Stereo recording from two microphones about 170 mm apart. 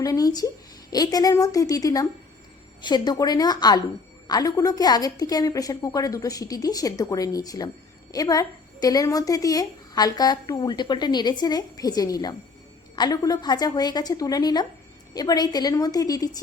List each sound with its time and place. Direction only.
0.0 s a woman's voice: 20° left (ahead or behind)